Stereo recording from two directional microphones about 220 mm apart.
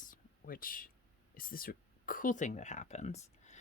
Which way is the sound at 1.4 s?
40° left (ahead or behind).